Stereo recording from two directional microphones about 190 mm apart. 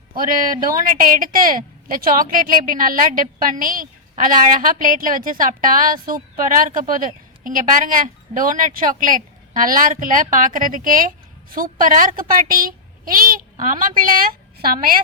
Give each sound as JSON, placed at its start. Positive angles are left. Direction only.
{"t": 0.1, "sound": "a woman's voice", "side_deg": -50}